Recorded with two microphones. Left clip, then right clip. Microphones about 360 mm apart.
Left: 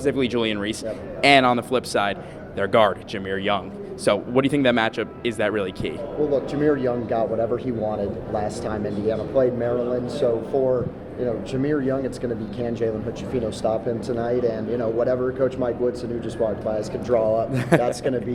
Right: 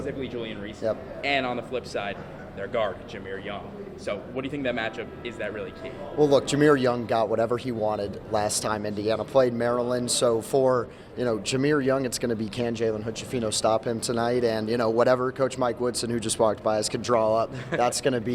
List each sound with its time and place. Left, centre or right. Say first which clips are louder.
0.0 s speech: left 10 dB; left
1.2 s a man's voice: left 12 dB; left
6.2 s speech: right 2 dB; right